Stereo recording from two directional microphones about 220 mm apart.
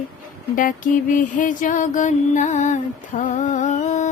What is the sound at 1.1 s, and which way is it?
Music, 35° left (ahead or behind).